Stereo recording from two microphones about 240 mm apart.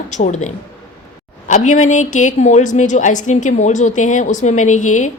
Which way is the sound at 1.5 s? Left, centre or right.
Left.